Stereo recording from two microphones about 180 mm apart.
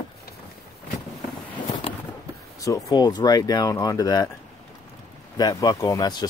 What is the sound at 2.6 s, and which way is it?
Speech, 20° left (ahead or behind).